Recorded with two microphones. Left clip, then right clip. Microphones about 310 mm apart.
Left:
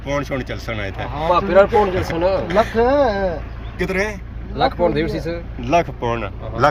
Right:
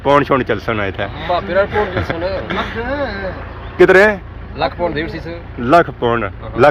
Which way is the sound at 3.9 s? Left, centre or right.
Centre.